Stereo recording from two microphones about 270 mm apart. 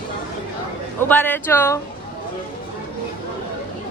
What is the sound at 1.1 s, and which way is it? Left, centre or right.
Speech, centre.